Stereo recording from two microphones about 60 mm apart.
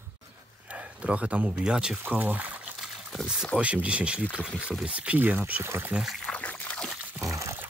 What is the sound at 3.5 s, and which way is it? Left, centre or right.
Speech, right.